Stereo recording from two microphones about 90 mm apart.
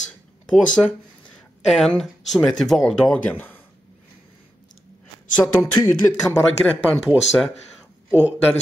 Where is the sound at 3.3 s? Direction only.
20° left (ahead or behind).